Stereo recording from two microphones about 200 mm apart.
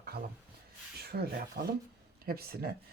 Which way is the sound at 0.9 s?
50° right (ahead or behind).